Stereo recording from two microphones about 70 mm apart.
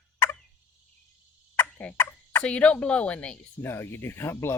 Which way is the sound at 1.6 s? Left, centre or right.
Left.